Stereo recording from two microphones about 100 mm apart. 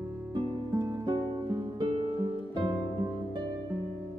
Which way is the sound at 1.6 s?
65° right (ahead or behind).